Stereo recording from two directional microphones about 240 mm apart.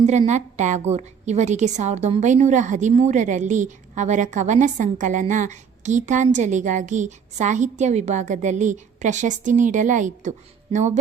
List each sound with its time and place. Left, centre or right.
0.0 s a woman's voice: right